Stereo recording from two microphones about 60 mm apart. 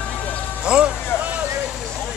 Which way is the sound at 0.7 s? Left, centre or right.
Centre.